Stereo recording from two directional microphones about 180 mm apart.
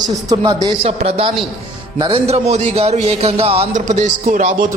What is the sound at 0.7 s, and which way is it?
A man's voice, 30° right (ahead or behind).